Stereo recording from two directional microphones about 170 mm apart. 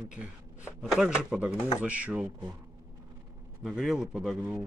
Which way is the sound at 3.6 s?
Centre (ahead or behind).